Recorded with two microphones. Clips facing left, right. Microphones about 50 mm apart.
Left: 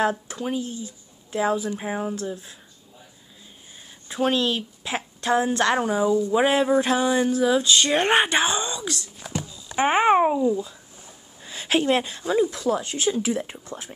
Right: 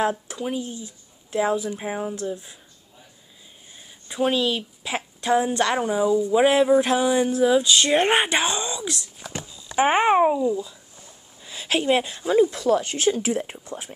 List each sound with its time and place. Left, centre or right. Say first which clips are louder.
0.3 s speech: even; centre
4.1 s speech: even; centre
6.9 s a sound: right 1 dB; centre
8.3 s speech: left 1 dB; centre
8.7 s a sound: even; centre
9.8 s a child's voice: even; centre
11.4 s a sound: left 2 dB; centre
11.9 s speech: right 1 dB; centre
12.4 s speech: right 3 dB; right
13.1 s speech: left 2 dB; right
13.5 s speech: right 1 dB; right